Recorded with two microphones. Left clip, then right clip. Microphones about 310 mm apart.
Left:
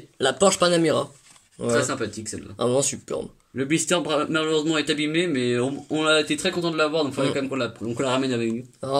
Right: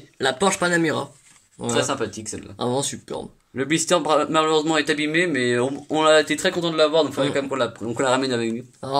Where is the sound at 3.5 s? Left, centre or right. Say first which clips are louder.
Right 3 dB; centre.